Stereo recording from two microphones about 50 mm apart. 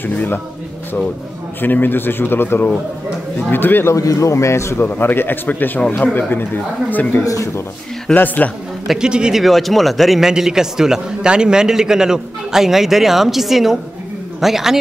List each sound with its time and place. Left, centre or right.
0.0 s speech: left
1.6 s speech: left
3.8 s a man's voice: left
4.7 s speech: left
7.2 s speech: left
8.1 s speech: left
8.8 s a man's voice: centre
9.4 s a man's voice: centre